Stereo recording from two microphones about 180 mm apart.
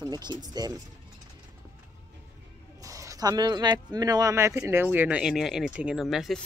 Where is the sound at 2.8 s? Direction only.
20° right (ahead or behind).